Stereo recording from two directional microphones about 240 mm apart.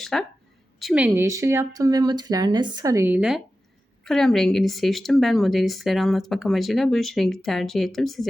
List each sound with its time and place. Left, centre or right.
0.0 s a woman's voice: centre